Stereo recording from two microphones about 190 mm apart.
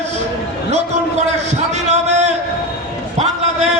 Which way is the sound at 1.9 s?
35° right (ahead or behind).